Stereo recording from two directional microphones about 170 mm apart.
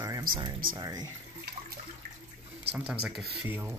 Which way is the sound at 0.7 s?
25° right (ahead or behind).